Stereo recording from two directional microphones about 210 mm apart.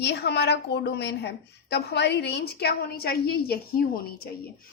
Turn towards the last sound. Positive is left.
turn(degrees=45)  # may be behind; listen again after turning